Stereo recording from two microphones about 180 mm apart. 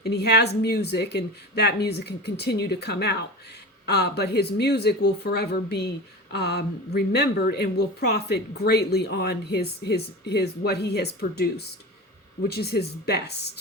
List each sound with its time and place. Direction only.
0.0 s a woman's voice: 65° left (ahead or behind)